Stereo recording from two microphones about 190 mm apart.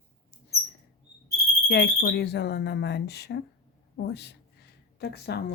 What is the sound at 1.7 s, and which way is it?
Speech, 60° left (ahead or behind).